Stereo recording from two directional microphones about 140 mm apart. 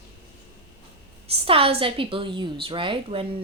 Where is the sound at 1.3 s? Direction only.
40° right (ahead or behind).